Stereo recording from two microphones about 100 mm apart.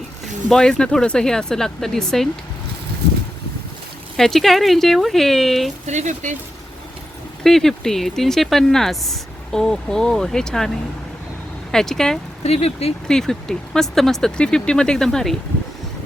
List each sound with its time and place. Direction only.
0.5 s speech: 5° left (ahead or behind)
4.2 s speech: 5° left (ahead or behind)
7.4 s speech: 5° left (ahead or behind)
11.7 s speech: 5° left (ahead or behind)
12.4 s speech: 90° left
13.1 s speech: 5° left (ahead or behind)